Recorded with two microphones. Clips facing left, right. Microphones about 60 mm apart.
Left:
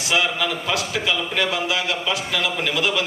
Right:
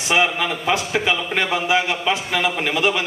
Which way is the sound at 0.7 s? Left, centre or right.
Right.